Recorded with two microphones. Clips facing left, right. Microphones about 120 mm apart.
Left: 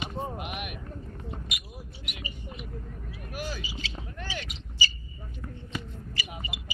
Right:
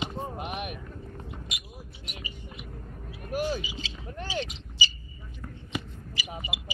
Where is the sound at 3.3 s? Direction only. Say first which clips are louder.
Right 8 dB; 30° right (ahead or behind).